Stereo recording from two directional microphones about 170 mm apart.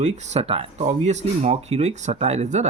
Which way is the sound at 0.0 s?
40° right (ahead or behind).